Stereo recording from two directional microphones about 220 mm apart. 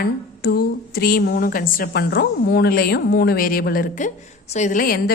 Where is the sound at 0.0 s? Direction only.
45° left (ahead or behind).